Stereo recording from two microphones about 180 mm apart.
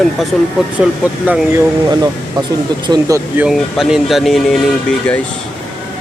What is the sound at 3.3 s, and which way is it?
Speech, 5° right (ahead or behind).